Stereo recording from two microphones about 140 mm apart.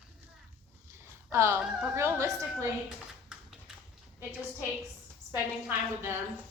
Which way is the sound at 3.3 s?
5° right (ahead or behind).